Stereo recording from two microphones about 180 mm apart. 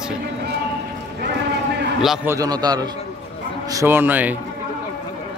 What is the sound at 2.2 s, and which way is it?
A man's voice, 20° right (ahead or behind).